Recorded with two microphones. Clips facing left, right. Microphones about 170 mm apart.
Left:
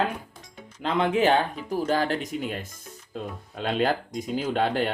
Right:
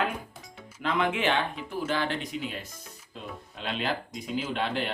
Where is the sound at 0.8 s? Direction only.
30° left (ahead or behind).